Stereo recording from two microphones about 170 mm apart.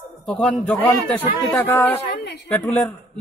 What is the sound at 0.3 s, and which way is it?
A man's voice, 5° left (ahead or behind).